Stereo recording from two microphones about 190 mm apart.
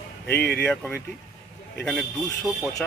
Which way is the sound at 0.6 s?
5° left (ahead or behind).